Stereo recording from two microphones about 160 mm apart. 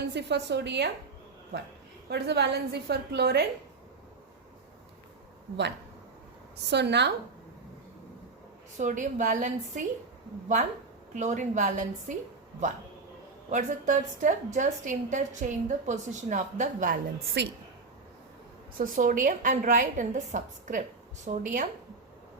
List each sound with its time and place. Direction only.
0.1 s a woman's voice: 90° right
2.0 s a woman's voice: 90° right
6.7 s a woman's voice: 90° right
8.8 s a woman's voice: 50° right (ahead or behind)
11.1 s a woman's voice: 50° right (ahead or behind)
13.5 s a woman's voice: 50° right (ahead or behind); by 17.5 s 80° right
18.8 s a woman's voice: 55° right (ahead or behind)